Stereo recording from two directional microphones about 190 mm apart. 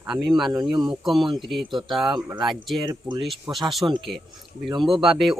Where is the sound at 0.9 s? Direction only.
Centre (ahead or behind).